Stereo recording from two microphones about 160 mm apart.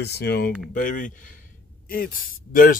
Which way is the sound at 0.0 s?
85° left.